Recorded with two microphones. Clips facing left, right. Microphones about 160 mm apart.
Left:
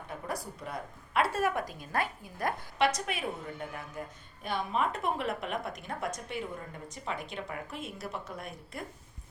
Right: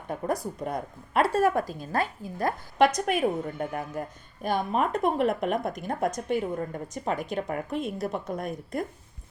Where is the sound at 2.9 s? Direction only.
50° right (ahead or behind).